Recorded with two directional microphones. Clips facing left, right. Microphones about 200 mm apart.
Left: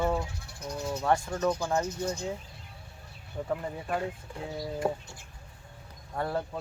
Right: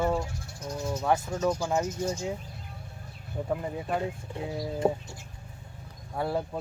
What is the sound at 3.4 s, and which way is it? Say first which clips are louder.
Speech: right 2 dB; 10° right (ahead or behind).